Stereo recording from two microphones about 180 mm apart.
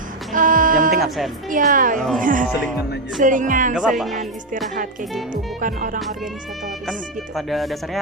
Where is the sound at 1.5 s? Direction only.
50° right (ahead or behind).